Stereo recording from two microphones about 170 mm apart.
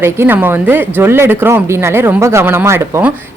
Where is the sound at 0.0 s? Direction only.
15° right (ahead or behind).